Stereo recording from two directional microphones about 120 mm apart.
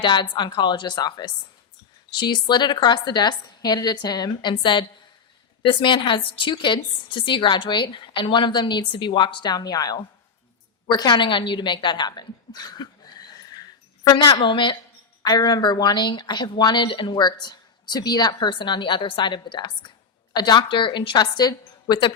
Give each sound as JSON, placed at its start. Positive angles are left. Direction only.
{"t": 0.0, "sound": "a woman's voice", "side_deg": 40}